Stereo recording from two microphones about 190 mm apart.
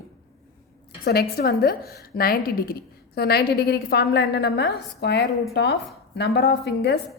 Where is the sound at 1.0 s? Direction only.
55° left (ahead or behind).